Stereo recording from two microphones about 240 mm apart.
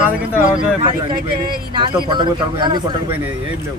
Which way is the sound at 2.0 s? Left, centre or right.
Centre.